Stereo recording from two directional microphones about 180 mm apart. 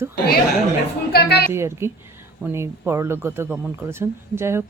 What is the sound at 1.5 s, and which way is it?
Speech, 15° right (ahead or behind).